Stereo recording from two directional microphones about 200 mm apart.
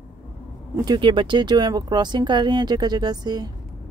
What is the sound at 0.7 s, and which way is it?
Speech, 20° right (ahead or behind).